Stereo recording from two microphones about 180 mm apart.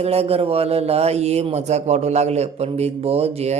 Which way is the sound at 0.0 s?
35° right (ahead or behind).